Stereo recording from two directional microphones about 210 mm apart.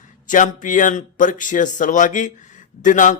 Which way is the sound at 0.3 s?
40° left (ahead or behind).